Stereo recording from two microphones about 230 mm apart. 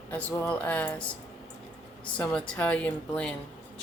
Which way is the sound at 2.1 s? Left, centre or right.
Centre.